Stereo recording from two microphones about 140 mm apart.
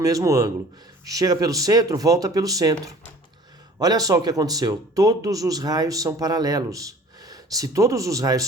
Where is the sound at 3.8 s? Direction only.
25° right (ahead or behind).